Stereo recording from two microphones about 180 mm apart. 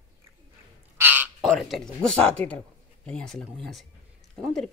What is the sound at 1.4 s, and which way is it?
Speech, centre (ahead or behind).